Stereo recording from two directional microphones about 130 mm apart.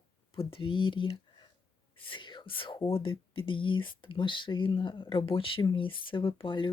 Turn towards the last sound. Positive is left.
turn(degrees=40)  # may be behind; listen again after turning